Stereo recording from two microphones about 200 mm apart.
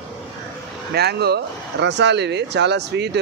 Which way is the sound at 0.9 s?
55° right (ahead or behind).